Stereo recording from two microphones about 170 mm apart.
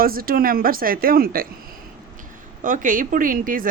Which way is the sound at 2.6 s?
50° right (ahead or behind).